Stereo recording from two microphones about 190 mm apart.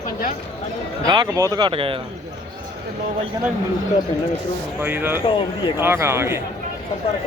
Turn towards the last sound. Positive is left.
turn(degrees=-15)  # may be behind; listen again after turning